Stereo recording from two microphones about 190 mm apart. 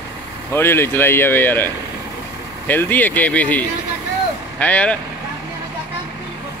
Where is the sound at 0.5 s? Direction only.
10° left (ahead or behind).